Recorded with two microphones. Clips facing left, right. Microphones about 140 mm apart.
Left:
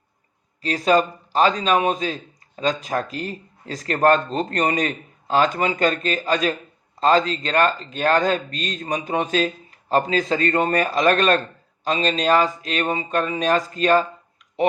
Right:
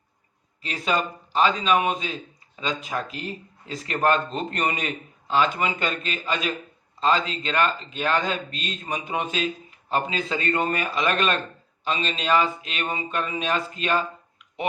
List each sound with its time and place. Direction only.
0.6 s speech: 40° left (ahead or behind)